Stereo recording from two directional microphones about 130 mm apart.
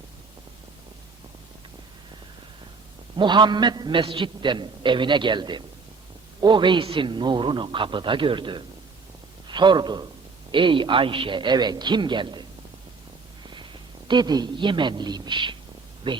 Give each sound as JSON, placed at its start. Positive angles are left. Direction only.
{"t": 3.2, "sound": "a man's voice", "side_deg": -35}
{"t": 13.5, "sound": "a man's voice", "side_deg": -35}